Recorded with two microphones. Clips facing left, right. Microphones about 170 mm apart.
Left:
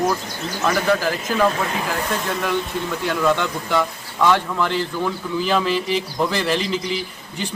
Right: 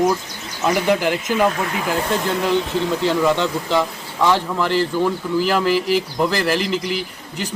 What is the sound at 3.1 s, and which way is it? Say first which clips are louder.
A man's voice: left 1 dB; 15° right (ahead or behind).